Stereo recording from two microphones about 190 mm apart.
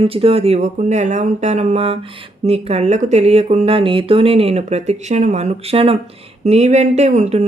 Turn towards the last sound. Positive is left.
turn(degrees=-35)  # may be behind; listen again after turning